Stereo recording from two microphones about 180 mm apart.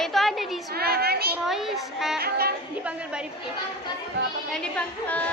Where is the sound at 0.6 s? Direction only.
60° right (ahead or behind).